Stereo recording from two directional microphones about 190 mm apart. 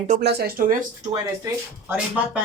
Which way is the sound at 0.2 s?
60° right (ahead or behind).